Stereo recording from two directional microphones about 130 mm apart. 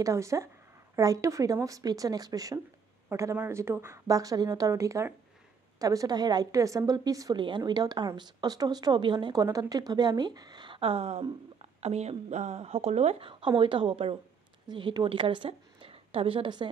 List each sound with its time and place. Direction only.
0.0 s a woman's voice: 25° right (ahead or behind); by 16.6 s 40° right (ahead or behind)